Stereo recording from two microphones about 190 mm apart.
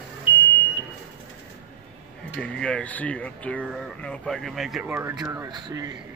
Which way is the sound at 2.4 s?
5° left (ahead or behind).